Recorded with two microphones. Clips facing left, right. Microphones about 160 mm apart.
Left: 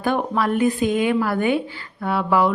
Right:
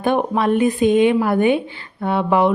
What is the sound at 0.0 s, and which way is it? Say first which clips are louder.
Speech: right 3 dB; 20° right (ahead or behind).